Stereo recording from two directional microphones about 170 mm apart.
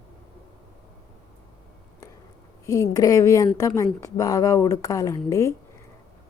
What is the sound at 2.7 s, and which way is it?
A woman's voice, 20° left (ahead or behind).